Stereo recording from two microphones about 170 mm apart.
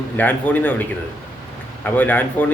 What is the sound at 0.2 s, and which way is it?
Speech, 10° left (ahead or behind).